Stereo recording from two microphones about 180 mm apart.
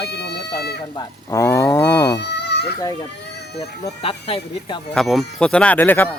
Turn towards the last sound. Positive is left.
turn(degrees=10)  # may be behind; listen again after turning